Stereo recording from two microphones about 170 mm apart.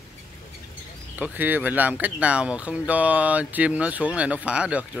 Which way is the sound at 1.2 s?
10° right (ahead or behind).